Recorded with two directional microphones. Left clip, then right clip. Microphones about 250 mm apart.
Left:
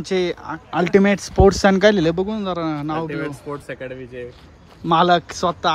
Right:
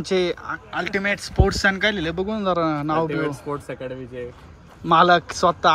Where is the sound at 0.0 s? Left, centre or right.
Centre.